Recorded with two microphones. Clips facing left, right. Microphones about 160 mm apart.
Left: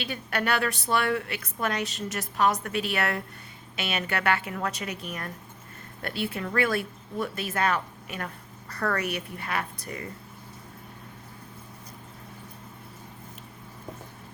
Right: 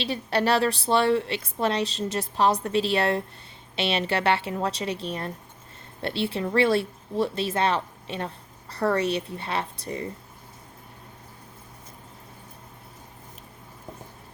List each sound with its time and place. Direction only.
0.0 s a woman's voice: 30° right (ahead or behind)